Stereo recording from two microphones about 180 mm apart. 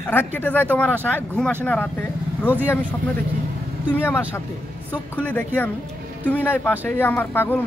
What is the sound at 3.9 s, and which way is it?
Speech, 10° left (ahead or behind).